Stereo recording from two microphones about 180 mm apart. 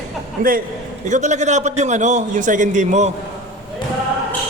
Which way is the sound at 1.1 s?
40° right (ahead or behind).